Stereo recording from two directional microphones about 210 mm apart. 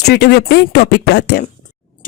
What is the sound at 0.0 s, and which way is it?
Speech, 50° left (ahead or behind).